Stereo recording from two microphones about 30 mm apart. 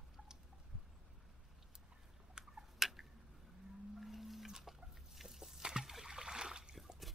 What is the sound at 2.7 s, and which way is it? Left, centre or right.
Tick-tock, centre.